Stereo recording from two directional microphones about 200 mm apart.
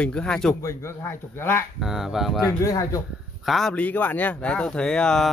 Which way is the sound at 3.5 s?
Centre (ahead or behind).